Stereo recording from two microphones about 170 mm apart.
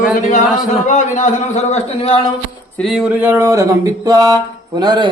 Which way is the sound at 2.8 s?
Centre (ahead or behind).